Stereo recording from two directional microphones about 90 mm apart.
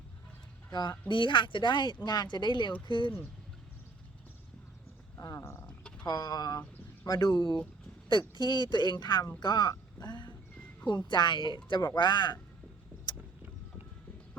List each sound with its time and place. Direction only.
0.7 s speech: 55° left (ahead or behind)
5.4 s speech: 25° left (ahead or behind)
5.6 s a sound: 15° left (ahead or behind)
6.1 s speech: 45° left (ahead or behind)